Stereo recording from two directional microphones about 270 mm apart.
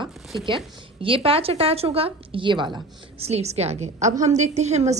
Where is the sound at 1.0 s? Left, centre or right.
Centre.